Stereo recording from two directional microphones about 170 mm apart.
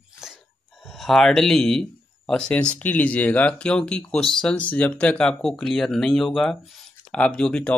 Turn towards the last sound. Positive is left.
turn(degrees=5)  # may be behind; listen again after turning